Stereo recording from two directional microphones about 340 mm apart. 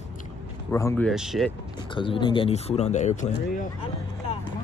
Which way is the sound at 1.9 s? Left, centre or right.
Centre.